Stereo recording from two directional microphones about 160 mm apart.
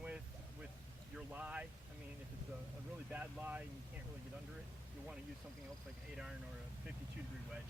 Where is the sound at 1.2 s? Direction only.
5° right (ahead or behind).